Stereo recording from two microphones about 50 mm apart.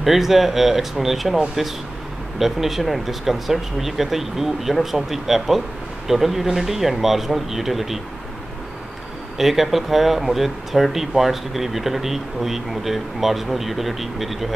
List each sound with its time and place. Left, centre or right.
0.0 s speech: centre
9.4 s speech: centre